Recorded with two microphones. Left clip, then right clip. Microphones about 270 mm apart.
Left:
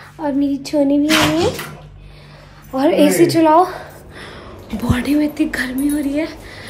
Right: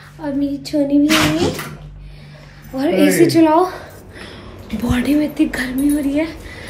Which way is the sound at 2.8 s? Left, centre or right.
Centre.